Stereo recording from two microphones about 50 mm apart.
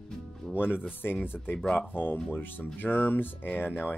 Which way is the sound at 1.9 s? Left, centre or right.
Left.